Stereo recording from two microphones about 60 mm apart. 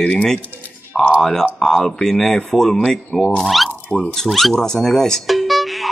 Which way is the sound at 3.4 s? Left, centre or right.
Centre.